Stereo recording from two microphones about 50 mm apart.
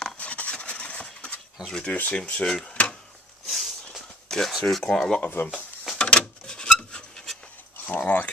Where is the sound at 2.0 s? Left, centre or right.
Left.